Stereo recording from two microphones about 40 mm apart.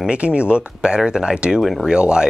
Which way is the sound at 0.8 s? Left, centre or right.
Centre.